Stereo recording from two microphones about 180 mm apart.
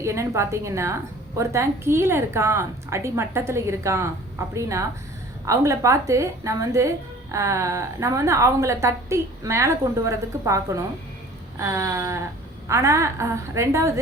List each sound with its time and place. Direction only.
0.0 s a woman's voice: 15° right (ahead or behind)
11.6 s a woman's voice: 15° right (ahead or behind)